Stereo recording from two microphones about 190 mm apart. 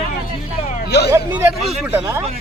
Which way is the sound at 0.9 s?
60° left (ahead or behind).